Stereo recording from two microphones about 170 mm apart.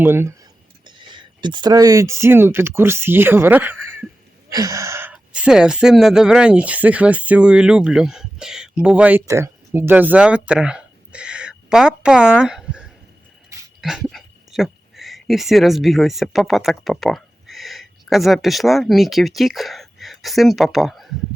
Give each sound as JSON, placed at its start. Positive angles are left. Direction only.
{"t": 0.0, "sound": "speech", "side_deg": -15}
{"t": 0.9, "sound": "speech", "side_deg": -30}
{"t": 4.4, "sound": "gasp", "side_deg": -20}
{"t": 5.1, "sound": "speech", "side_deg": -5}